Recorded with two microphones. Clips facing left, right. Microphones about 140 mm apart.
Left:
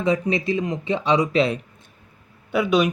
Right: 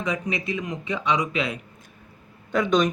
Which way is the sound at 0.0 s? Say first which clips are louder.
Left 6 dB; 30° left (ahead or behind).